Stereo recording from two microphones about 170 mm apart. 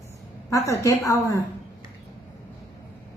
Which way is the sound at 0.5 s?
20° left (ahead or behind).